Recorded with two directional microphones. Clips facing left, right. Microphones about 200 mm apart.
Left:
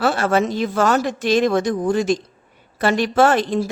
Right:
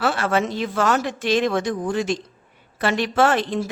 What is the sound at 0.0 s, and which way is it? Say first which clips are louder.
Speech: left 3 dB; 40° left (ahead or behind).